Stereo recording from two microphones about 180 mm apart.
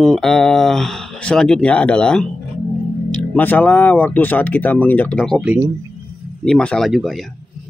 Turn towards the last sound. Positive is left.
turn(degrees=0)  # may be behind; listen again after turning